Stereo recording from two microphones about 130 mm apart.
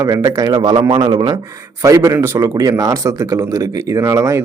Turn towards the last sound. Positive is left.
turn(degrees=-25)  # may be behind; listen again after turning